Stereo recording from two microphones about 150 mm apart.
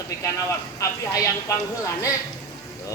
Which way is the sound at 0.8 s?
20° left (ahead or behind).